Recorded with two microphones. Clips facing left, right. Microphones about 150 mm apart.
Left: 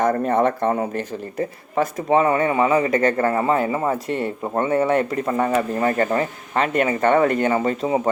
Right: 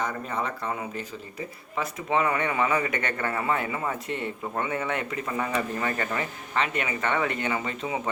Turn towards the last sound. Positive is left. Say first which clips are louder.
# left 10 dB
turn(degrees=40)  # may be behind; listen again after turning